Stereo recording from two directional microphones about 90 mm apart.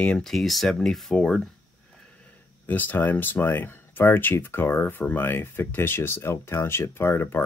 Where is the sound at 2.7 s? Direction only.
20° left (ahead or behind).